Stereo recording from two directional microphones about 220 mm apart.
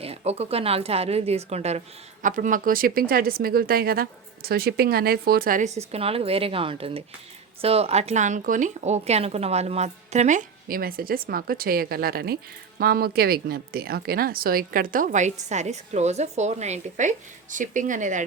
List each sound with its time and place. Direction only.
0.0 s a woman's voice: 30° right (ahead or behind)